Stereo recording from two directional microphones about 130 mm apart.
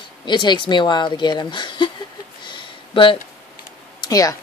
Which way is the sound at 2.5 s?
40° left (ahead or behind).